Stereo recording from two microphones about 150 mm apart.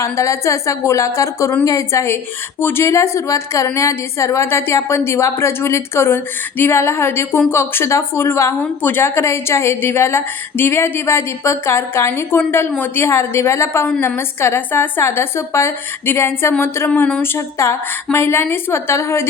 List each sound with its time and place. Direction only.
0.0 s a woman's voice: 20° left (ahead or behind)